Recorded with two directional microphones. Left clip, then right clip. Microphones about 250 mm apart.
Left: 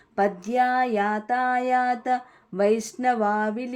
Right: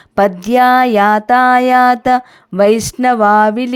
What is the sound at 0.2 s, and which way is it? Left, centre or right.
Speech, right.